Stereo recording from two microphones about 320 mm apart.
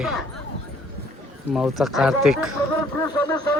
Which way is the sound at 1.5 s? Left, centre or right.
Centre.